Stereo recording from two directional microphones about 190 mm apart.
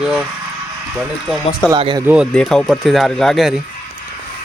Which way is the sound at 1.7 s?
25° right (ahead or behind).